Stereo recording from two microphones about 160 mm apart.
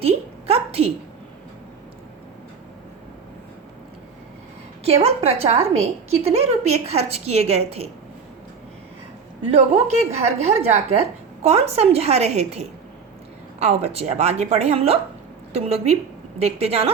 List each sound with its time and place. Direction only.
0.0 s a woman's voice: 40° right (ahead or behind)
4.8 s a woman's voice: 40° right (ahead or behind)
9.5 s a woman's voice: 40° right (ahead or behind)